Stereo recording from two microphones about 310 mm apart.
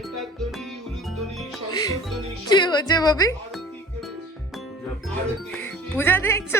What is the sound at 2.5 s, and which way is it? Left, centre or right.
Speech, centre.